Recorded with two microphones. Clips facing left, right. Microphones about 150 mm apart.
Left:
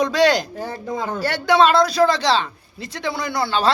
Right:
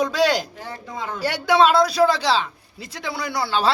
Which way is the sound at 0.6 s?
40° left (ahead or behind).